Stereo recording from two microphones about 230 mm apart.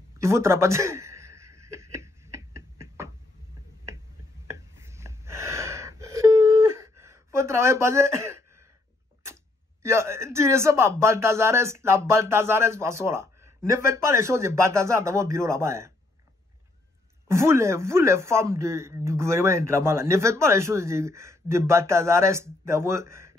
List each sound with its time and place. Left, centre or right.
0.2 s a sound: centre
4.5 s gasp: centre
9.8 s speech: centre
17.3 s speech: centre